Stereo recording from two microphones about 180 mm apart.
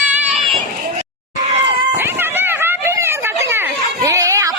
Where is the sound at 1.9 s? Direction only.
10° right (ahead or behind).